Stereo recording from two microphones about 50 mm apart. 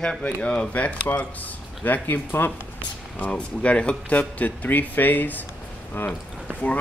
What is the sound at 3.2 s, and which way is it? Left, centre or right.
Speech, left.